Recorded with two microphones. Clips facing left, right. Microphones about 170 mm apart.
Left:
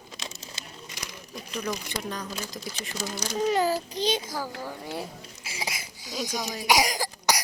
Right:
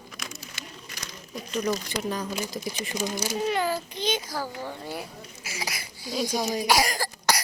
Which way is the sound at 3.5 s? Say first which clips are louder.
Left 2 dB; 35° left (ahead or behind).